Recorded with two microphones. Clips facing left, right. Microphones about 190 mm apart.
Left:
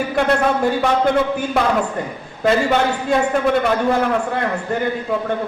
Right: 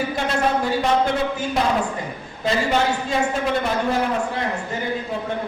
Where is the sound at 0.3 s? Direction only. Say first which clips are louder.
Left 2 dB; 60° left (ahead or behind).